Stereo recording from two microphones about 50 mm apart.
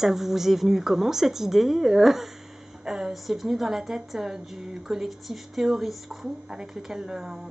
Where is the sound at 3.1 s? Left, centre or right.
Centre.